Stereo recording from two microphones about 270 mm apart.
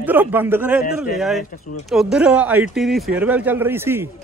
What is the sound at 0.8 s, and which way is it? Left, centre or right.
Speech, left.